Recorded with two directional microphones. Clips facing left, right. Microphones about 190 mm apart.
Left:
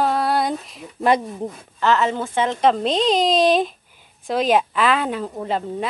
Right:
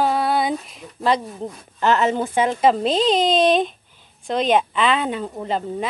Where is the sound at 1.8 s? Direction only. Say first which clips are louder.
Right 1 dB; 15° right (ahead or behind).